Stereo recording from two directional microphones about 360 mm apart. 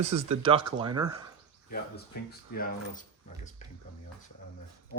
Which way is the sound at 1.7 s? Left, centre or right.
Left.